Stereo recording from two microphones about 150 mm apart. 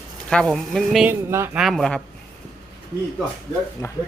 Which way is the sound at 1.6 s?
Centre (ahead or behind).